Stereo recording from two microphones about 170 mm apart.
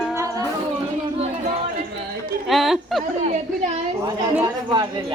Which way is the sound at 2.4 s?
Centre (ahead or behind).